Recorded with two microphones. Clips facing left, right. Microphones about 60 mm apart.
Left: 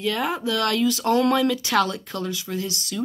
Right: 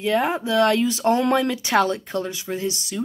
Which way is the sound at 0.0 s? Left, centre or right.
Right.